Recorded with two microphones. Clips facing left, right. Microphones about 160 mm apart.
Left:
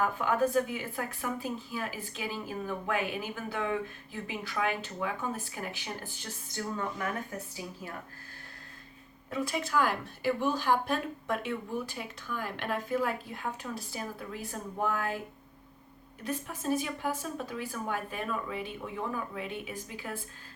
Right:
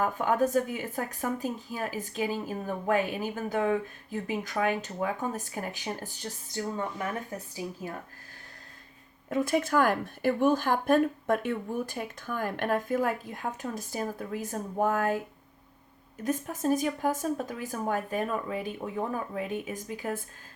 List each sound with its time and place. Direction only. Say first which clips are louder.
0.0 s speech: right 2 dB; 40° right (ahead or behind)
6.7 s speech: right 2 dB; 25° right (ahead or behind)
9.3 s speech: right 5 dB; 50° right (ahead or behind)
16.2 s speech: right 5 dB; 45° right (ahead or behind)